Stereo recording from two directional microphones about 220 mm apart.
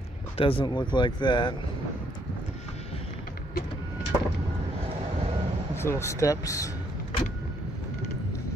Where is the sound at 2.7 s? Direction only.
30° left (ahead or behind).